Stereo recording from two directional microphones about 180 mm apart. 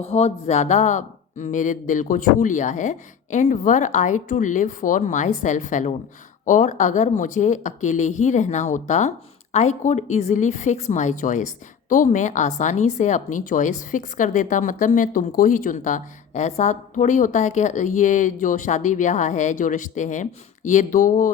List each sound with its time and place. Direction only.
0.0 s speech: 35° left (ahead or behind)